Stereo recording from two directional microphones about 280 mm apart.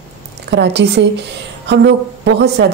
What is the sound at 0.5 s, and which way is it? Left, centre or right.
Speech, right.